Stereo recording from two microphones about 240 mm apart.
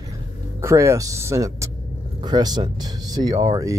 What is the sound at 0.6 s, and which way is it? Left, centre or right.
Speech, centre.